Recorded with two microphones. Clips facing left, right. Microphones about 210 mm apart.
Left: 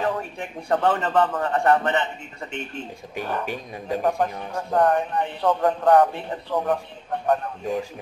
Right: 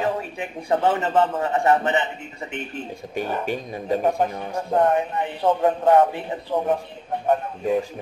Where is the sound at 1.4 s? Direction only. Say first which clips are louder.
Right 1 dB; 10° right (ahead or behind).